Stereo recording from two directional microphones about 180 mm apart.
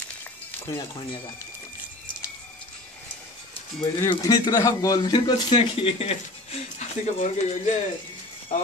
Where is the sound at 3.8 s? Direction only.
20° left (ahead or behind).